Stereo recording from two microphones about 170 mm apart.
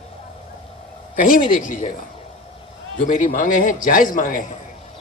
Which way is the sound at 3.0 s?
50° left (ahead or behind).